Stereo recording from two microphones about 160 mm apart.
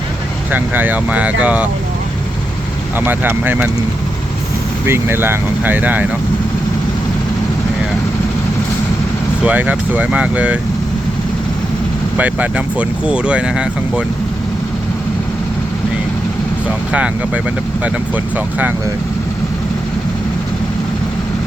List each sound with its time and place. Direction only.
0.5 s speech: 10° right (ahead or behind)
3.0 s speech: 10° right (ahead or behind)
4.9 s speech: 15° right (ahead or behind)
9.4 s speech: 10° right (ahead or behind)
12.1 s speech: 10° right (ahead or behind)
16.9 s speech: 10° right (ahead or behind)